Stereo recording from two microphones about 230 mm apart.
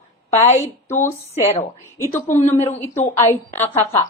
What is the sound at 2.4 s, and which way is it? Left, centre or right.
Speech, left.